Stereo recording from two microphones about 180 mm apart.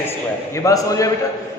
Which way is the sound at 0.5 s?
15° left (ahead or behind).